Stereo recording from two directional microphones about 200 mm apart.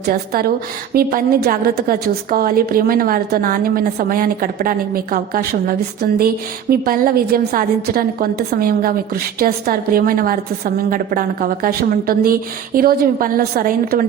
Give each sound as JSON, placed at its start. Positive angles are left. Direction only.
{"t": 0.1, "sound": "a woman's voice", "side_deg": -45}